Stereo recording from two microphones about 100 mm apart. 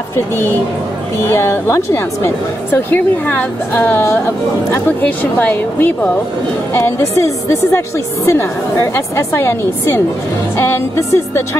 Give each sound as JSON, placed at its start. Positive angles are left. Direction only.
{"t": 1.2, "sound": "a woman's voice", "side_deg": 25}
{"t": 6.7, "sound": "a woman's voice", "side_deg": 30}